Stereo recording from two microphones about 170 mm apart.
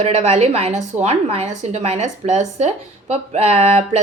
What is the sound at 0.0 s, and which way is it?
A woman's voice, 40° right (ahead or behind).